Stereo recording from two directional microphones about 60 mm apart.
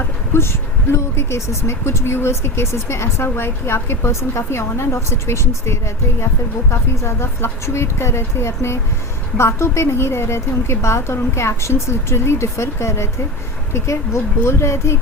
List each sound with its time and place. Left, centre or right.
0.3 s speech: left